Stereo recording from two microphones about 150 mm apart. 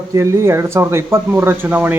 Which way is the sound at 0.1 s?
20° right (ahead or behind).